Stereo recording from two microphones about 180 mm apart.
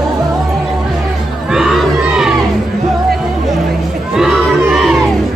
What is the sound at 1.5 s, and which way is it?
Crowd, centre (ahead or behind).